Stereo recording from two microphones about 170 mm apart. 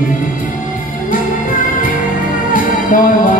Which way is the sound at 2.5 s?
55° left (ahead or behind).